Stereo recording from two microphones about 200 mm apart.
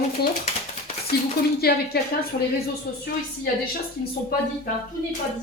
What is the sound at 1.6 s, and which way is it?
Speech, 50° left (ahead or behind).